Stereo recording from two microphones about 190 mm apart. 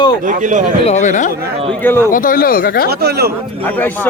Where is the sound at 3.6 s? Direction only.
10° left (ahead or behind).